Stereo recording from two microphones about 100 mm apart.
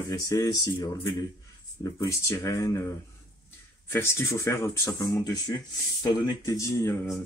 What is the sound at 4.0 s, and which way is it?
Speech, 30° left (ahead or behind).